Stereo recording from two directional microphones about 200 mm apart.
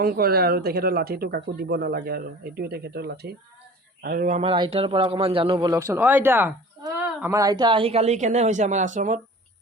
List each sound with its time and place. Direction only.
0.0 s speech: 50° right (ahead or behind)
4.5 s speech: 25° right (ahead or behind)